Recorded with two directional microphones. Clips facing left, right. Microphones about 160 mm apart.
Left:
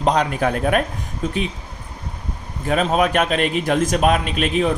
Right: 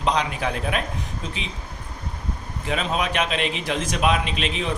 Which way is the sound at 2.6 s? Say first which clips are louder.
Left 7 dB; 45° left (ahead or behind).